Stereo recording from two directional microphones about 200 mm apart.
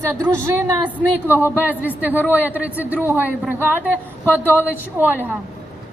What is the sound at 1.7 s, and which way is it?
A man's voice, 10° right (ahead or behind).